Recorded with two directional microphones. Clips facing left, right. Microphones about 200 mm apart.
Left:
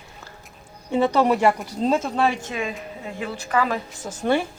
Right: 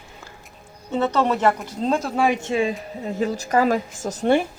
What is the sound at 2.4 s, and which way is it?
Speech, 30° right (ahead or behind).